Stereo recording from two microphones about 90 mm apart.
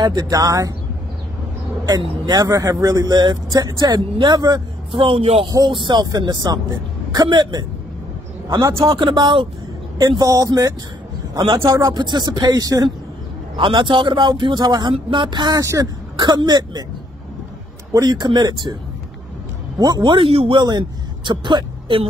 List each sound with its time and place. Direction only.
0.0 s speech: 50° right (ahead or behind)
1.9 s speech: 50° right (ahead or behind)
4.9 s speech: 85° right
5.7 s speech: 65° right (ahead or behind)
8.7 s speech: 40° right (ahead or behind)
9.0 s speech: 60° right (ahead or behind)
9.9 s speech: 45° right (ahead or behind)
11.9 s speech: 50° right (ahead or behind)
13.6 s speech: 65° right (ahead or behind); by 16.8 s 50° right (ahead or behind)
17.9 s speech: 50° right (ahead or behind)
19.8 s speech: 55° right (ahead or behind); by 20.6 s 85° right
20.6 s speech: 55° right (ahead or behind)